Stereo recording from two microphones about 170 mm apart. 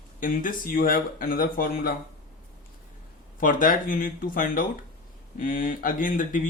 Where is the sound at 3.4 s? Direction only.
55° left (ahead or behind).